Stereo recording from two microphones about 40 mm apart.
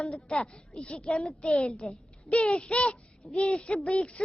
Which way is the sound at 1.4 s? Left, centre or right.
Left.